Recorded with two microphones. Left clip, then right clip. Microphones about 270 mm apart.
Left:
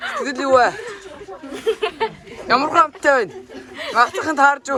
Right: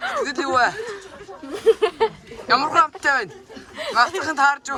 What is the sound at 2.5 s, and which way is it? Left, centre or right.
Speech, centre.